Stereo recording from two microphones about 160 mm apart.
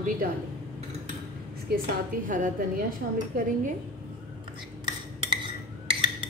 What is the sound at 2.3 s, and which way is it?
Speech, 55° right (ahead or behind).